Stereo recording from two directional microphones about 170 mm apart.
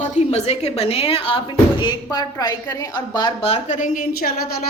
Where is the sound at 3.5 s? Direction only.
45° left (ahead or behind); by 4.5 s 65° left (ahead or behind).